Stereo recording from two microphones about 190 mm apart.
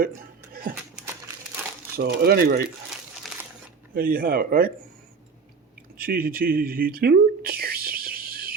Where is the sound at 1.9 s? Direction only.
55° right (ahead or behind).